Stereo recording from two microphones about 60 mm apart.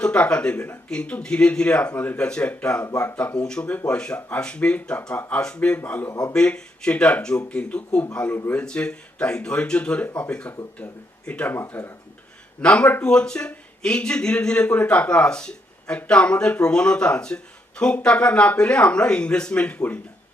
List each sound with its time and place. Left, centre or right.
0.0 s speech: centre
6.1 s speech: left
6.3 s speech: centre
11.7 s speech: left
12.6 s a man's voice: centre